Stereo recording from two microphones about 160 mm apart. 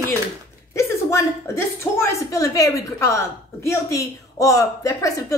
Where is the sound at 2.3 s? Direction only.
20° left (ahead or behind).